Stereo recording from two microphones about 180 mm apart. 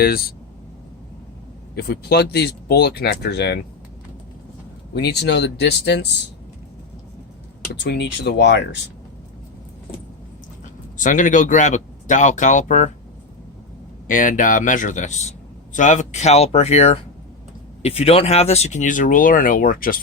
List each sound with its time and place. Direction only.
0.0 s speech: 55° left (ahead or behind)
1.7 s speech: 60° left (ahead or behind)
4.9 s speech: 65° left (ahead or behind)
7.7 s speech: 65° left (ahead or behind)
10.9 s speech: 45° left (ahead or behind)
14.1 s speech: 50° left (ahead or behind)